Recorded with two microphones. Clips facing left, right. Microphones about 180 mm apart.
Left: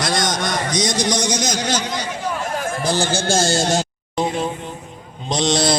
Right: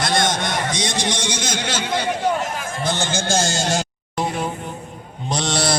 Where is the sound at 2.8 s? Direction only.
35° left (ahead or behind).